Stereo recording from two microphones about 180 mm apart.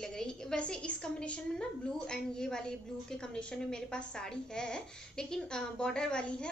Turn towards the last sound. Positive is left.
turn(degrees=5)  # may be behind; listen again after turning